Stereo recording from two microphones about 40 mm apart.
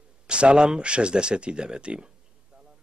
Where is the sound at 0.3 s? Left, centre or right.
Right.